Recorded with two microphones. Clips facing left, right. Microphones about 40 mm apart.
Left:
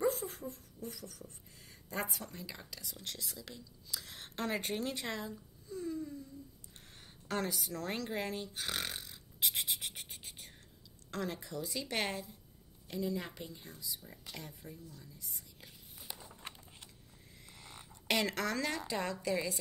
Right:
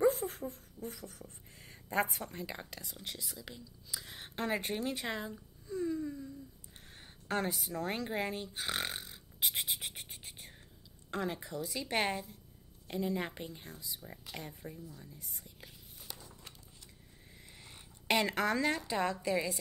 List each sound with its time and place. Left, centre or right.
0.0 s a sound: centre
0.3 s a sound: right
2.3 s speech: right
3.0 s speech: centre
4.9 s a woman's voice: right
5.7 s wail: right
6.9 s a sound: right
7.7 s speech: right; by 10.5 s centre
11.1 s speech: right
12.8 s a woman's voice: right
15.1 s speech: right
16.2 s crumpling: left
17.4 s a sound: right
18.0 s a woman's voice: right